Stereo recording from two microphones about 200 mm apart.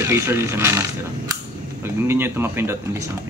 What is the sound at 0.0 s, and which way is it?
Speech, 10° right (ahead or behind).